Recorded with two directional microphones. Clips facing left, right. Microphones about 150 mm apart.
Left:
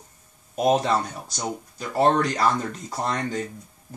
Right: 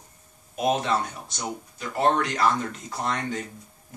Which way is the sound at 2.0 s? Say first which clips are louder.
Left 3 dB; 35° left (ahead or behind).